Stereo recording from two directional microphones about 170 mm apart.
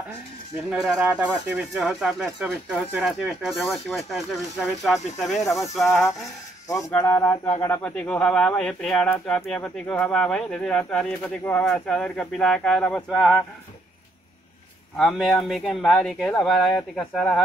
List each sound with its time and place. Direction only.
0.7 s speech: 5° right (ahead or behind)
5.4 s speech: 20° left (ahead or behind)
5.8 s speech: centre (ahead or behind)
6.7 s speech: 20° left (ahead or behind); by 13.4 s centre (ahead or behind)
15.0 s speech: centre (ahead or behind)